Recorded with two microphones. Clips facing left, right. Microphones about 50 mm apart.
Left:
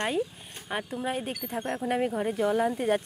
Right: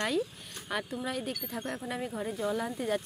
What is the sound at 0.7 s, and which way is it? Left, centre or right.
Speech, left.